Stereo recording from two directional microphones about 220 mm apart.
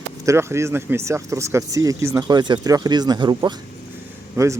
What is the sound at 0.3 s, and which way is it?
Speech, 10° right (ahead or behind).